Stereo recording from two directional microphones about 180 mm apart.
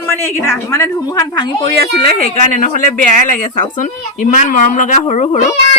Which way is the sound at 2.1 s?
40° left (ahead or behind).